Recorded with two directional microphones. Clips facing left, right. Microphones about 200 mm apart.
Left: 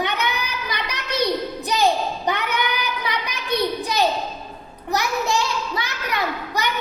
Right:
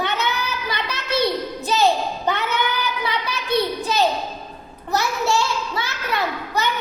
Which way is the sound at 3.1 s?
15° left (ahead or behind).